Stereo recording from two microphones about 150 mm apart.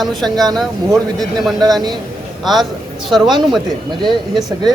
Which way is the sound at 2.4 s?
Centre (ahead or behind).